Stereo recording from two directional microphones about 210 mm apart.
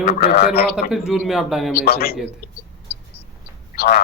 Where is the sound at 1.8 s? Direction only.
45° left (ahead or behind).